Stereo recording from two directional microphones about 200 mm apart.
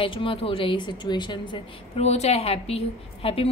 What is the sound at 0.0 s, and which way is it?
A woman's voice, 25° left (ahead or behind).